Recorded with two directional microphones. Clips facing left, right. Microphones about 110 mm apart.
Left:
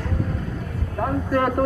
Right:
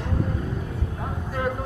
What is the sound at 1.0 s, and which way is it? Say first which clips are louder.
Vehicle: left 9 dB; 60° left (ahead or behind).